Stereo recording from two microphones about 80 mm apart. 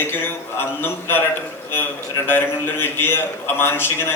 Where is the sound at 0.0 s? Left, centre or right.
Left.